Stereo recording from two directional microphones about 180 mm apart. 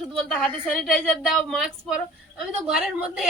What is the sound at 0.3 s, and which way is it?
Speech, 5° left (ahead or behind).